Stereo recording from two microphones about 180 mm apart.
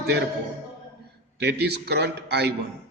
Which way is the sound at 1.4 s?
65° right (ahead or behind).